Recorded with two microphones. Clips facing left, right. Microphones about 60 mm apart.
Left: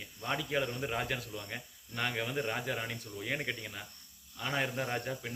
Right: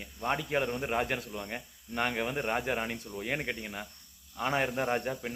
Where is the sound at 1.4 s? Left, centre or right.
Right.